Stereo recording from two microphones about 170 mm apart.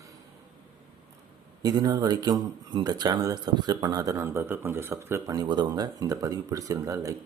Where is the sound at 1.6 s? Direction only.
20° right (ahead or behind).